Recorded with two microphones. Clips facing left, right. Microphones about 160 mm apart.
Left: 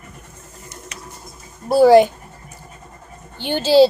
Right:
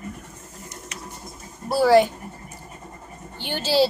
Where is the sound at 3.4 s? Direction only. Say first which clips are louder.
Left 8 dB; 20° left (ahead or behind).